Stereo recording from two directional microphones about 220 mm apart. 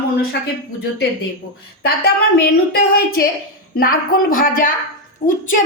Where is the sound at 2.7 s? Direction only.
40° left (ahead or behind).